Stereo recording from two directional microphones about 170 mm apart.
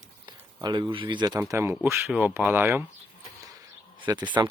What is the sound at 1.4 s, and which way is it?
Speech, 15° right (ahead or behind).